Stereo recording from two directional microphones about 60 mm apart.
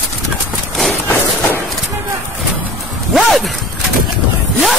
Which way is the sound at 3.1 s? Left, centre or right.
Centre.